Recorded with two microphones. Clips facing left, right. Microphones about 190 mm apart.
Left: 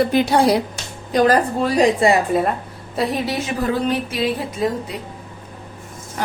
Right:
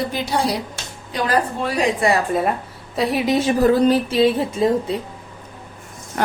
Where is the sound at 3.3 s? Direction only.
35° right (ahead or behind).